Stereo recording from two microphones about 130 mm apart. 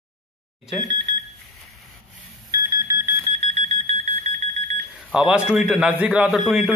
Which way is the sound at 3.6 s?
60° right (ahead or behind).